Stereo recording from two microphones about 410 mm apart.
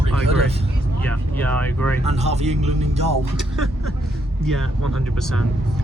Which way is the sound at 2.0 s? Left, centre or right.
Centre.